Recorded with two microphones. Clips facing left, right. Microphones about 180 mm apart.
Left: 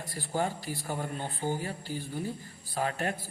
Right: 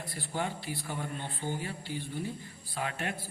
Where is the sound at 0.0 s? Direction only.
45° left (ahead or behind).